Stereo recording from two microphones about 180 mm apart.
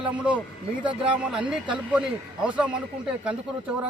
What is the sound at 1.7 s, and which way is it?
A man's voice, 5° right (ahead or behind).